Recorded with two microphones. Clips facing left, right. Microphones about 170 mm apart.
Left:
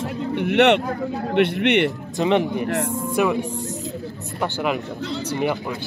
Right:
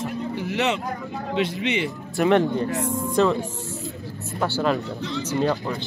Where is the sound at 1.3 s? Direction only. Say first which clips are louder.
Left 6 dB; 65° left (ahead or behind).